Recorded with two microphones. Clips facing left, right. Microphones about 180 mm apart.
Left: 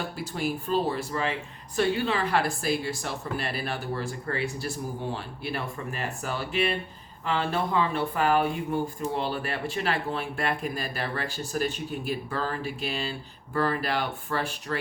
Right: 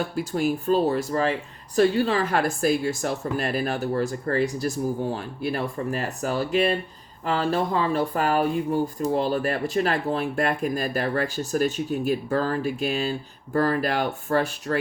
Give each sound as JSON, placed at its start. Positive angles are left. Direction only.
{"t": 0.2, "sound": "speech", "side_deg": -45}